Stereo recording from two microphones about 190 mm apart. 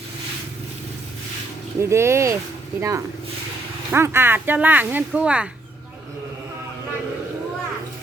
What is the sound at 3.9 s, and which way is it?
Speech, 15° right (ahead or behind).